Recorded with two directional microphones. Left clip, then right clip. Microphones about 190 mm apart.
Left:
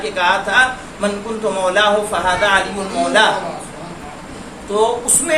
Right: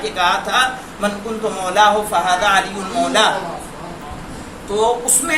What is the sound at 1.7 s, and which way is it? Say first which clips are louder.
Speech: right 4 dB; 15° left (ahead or behind).